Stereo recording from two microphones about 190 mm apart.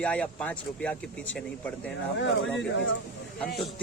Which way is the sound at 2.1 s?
70° left (ahead or behind).